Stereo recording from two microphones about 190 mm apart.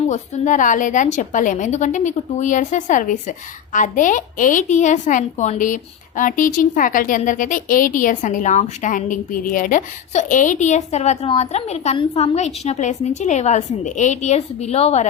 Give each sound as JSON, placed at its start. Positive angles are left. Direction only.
{"t": 0.1, "sound": "a woman's voice", "side_deg": 40}